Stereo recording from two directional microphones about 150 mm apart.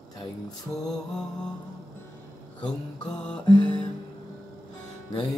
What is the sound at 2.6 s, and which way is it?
Mantra, 5° left (ahead or behind).